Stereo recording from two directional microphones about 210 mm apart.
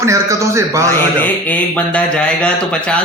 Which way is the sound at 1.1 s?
10° left (ahead or behind).